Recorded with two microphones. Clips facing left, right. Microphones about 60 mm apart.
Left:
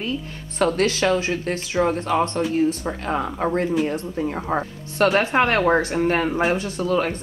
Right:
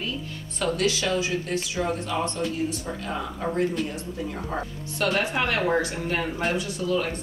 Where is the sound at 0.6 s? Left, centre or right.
Left.